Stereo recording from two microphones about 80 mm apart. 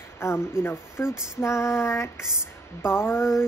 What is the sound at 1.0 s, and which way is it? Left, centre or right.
Female singing, left.